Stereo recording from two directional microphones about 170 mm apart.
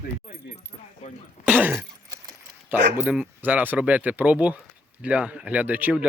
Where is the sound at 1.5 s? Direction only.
10° right (ahead or behind).